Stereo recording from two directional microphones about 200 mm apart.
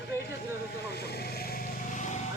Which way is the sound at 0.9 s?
55° left (ahead or behind).